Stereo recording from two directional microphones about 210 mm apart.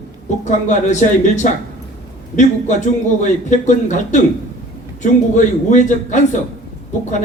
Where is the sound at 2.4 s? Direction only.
35° left (ahead or behind).